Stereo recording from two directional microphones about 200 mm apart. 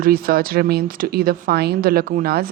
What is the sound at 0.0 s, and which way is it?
Speech, 45° right (ahead or behind).